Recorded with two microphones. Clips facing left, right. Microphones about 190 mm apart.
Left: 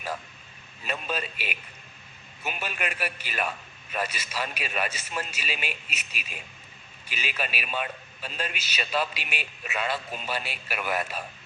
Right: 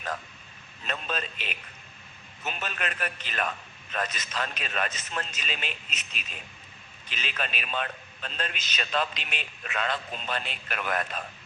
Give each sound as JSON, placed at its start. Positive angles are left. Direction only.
{"t": 0.9, "sound": "a man's voice", "side_deg": 10}